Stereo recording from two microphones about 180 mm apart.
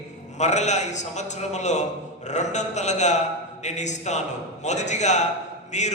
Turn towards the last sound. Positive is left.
turn(degrees=40)  # may be behind; listen again after turning